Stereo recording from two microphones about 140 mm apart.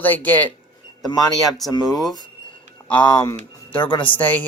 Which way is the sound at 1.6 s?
Centre (ahead or behind).